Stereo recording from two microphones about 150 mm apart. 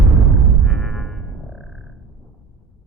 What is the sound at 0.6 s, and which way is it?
Music, centre (ahead or behind).